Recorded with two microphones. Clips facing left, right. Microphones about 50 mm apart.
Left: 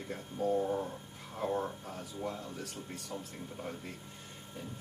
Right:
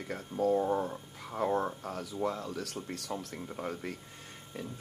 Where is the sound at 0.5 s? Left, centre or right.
Right.